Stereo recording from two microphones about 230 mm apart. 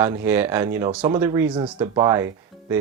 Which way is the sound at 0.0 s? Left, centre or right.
Centre.